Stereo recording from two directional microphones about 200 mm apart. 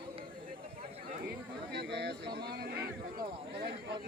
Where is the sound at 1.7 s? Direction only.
60° right (ahead or behind).